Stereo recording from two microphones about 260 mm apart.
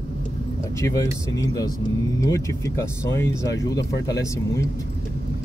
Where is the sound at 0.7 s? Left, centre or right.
Centre.